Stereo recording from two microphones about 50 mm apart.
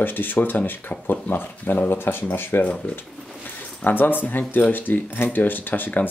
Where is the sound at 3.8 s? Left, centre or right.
Left.